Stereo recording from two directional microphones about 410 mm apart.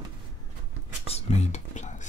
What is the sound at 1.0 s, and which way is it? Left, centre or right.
Whispering, centre.